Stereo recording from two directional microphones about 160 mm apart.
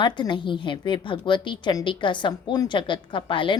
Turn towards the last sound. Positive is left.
turn(degrees=30)  # may be behind; listen again after turning